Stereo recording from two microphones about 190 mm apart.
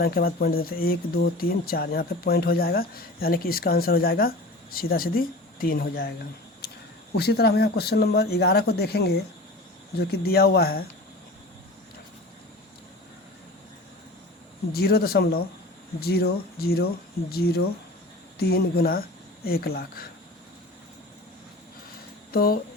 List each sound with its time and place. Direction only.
0.0 s speech: 55° left (ahead or behind)
7.2 s speech: 60° left (ahead or behind)
14.7 s speech: 55° left (ahead or behind)
22.3 s speech: 50° left (ahead or behind)